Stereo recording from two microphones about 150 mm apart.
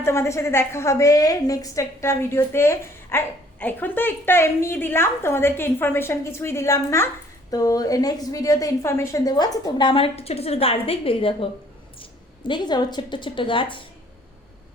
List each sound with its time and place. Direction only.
0.0 s a woman's voice: 15° left (ahead or behind); by 11.4 s 35° left (ahead or behind)
12.5 s a woman's voice: 30° left (ahead or behind)